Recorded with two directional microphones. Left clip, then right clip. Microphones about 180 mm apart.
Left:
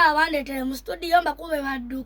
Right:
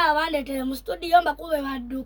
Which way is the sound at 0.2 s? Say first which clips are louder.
Left 2 dB; 5° left (ahead or behind).